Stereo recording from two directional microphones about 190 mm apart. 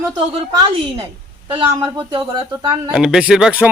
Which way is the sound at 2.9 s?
5° right (ahead or behind).